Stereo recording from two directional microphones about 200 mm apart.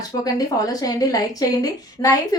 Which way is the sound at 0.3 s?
20° left (ahead or behind).